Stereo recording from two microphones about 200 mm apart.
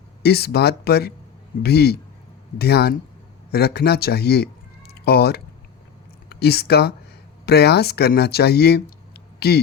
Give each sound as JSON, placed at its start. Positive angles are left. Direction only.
{"t": 0.2, "sound": "speech", "side_deg": 55}